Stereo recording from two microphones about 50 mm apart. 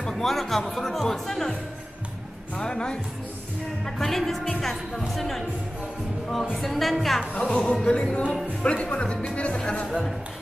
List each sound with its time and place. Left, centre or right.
0.0 s speech: centre
2.6 s speech: centre
6.5 s speech: centre
7.3 s speech: left
9.8 s speech: centre